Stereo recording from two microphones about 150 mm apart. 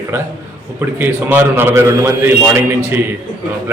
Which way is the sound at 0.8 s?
15° right (ahead or behind).